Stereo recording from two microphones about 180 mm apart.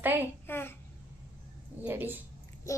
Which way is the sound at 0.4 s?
10° left (ahead or behind).